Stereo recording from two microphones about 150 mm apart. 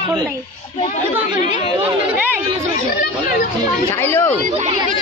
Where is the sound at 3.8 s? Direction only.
15° left (ahead or behind).